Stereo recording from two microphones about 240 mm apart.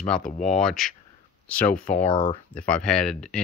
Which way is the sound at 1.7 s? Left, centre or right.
Left.